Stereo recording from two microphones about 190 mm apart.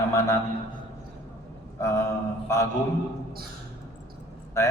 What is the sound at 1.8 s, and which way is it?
Speech, 15° left (ahead or behind).